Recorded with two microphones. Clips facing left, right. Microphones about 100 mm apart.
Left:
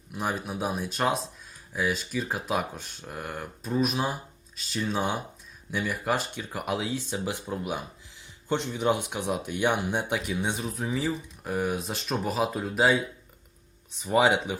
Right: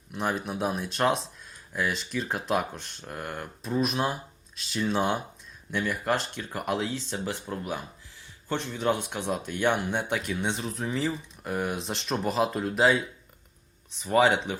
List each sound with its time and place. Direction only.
0.1 s speech: 5° left (ahead or behind)